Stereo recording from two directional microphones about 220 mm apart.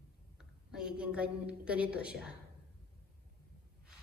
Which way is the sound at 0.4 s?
5° right (ahead or behind).